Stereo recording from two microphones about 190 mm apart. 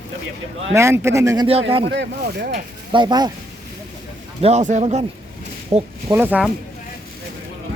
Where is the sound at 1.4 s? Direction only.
30° right (ahead or behind).